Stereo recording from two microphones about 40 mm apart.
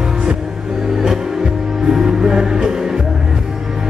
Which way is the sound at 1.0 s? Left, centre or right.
Centre.